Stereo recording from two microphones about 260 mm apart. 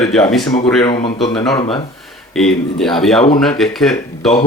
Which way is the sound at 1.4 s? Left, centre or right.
Centre.